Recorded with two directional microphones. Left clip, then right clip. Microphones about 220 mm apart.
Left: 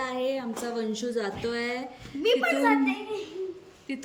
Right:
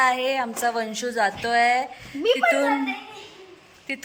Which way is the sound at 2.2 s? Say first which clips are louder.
Right 3 dB; 25° right (ahead or behind).